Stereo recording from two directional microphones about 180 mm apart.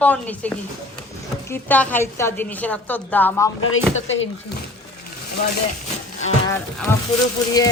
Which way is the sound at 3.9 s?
90° left.